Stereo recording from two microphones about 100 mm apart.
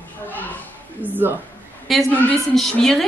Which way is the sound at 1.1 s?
20° right (ahead or behind).